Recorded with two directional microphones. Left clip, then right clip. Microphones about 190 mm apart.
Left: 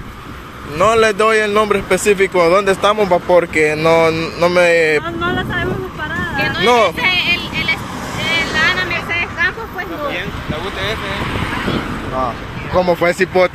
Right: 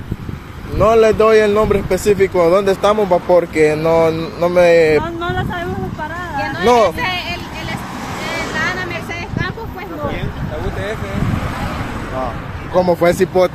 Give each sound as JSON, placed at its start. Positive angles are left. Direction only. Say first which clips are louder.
{"t": 0.7, "sound": "speech", "louder": "right 1 dB", "side_deg": 0}
{"t": 5.0, "sound": "vehicle", "louder": "left 2 dB", "side_deg": -50}
{"t": 6.3, "sound": "a sound", "louder": "left 3 dB", "side_deg": -35}
{"t": 7.0, "sound": "vehicle", "louder": "left 6 dB", "side_deg": -30}
{"t": 8.5, "sound": "a sound", "louder": "left 5 dB", "side_deg": -35}
{"t": 13.0, "sound": "speech", "louder": "even", "side_deg": -15}